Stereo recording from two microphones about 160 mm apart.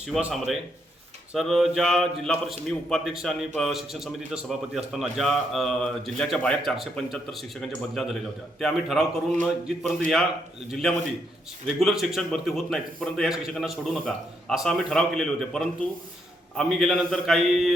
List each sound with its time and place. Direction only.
0.1 s a man's voice: 5° right (ahead or behind)